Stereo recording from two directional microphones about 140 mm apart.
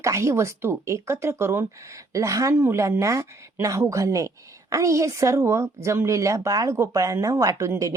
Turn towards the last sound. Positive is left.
turn(degrees=-20)  # may be behind; listen again after turning